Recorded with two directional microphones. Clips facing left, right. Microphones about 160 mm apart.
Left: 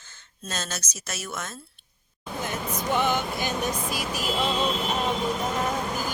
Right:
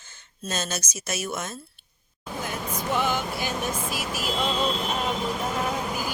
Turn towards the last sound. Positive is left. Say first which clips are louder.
# even
turn(degrees=-10)  # may be behind; listen again after turning